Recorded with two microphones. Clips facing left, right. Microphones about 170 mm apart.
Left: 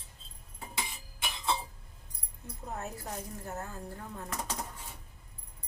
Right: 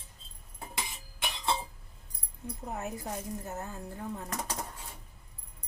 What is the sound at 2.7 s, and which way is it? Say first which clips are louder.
A woman's voice: right 2 dB; 15° right (ahead or behind).